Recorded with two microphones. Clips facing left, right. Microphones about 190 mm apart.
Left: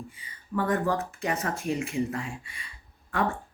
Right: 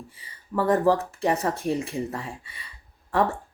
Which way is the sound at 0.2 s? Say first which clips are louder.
Right 3 dB; 35° right (ahead or behind).